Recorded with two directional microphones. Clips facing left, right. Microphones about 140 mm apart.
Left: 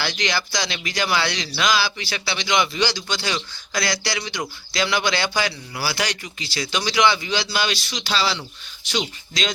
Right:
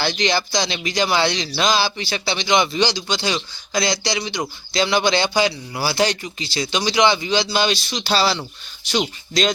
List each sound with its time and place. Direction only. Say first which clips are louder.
0.0 s speech: right 5 dB; 25° right (ahead or behind)
8.0 s speech: right 4 dB; 40° right (ahead or behind)